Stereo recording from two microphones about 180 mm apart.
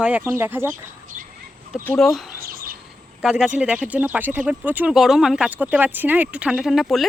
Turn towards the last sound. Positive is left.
turn(degrees=0)  # may be behind; listen again after turning